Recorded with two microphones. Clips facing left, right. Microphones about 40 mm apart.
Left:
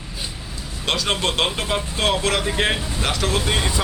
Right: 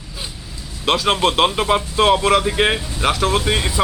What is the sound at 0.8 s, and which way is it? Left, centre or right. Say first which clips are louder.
A man's voice: right 5 dB; centre.